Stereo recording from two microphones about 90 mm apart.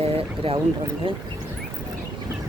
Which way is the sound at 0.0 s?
90° right.